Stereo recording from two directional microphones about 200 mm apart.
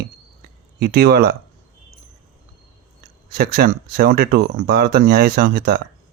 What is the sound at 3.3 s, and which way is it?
Speech, 50° right (ahead or behind).